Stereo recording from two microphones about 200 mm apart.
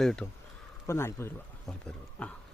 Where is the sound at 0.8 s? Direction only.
10° left (ahead or behind).